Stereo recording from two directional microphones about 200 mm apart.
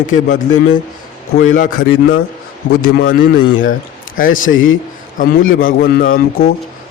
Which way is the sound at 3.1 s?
45° left (ahead or behind).